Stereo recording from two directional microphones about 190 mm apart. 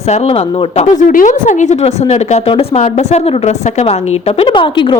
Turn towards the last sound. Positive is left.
turn(degrees=25)  # may be behind; listen again after turning